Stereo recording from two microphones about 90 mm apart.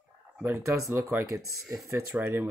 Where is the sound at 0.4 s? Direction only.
25° right (ahead or behind).